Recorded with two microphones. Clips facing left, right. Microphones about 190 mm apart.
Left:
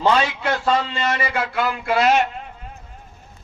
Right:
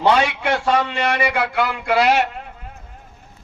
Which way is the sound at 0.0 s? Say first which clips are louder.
Right 2 dB; 70° right (ahead or behind).